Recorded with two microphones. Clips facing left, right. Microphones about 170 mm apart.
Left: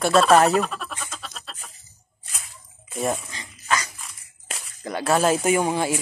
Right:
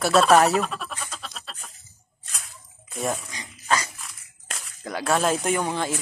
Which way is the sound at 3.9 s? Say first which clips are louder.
Even; centre (ahead or behind).